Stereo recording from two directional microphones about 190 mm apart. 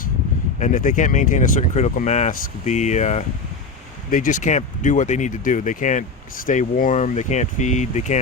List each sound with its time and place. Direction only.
0.6 s speech: 45° left (ahead or behind)